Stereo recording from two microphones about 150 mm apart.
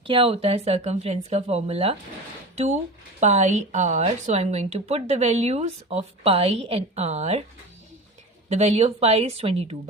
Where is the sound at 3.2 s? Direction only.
50° right (ahead or behind).